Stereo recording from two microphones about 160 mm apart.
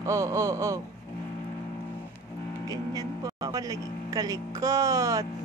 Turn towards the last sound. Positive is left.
turn(degrees=-20)  # may be behind; listen again after turning